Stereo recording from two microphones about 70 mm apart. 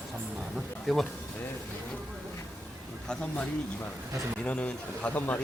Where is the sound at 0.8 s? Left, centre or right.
Centre.